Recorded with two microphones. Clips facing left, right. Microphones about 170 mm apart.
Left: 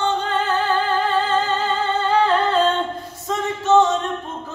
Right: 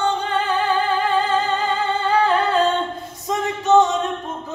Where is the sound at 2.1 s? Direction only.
10° right (ahead or behind).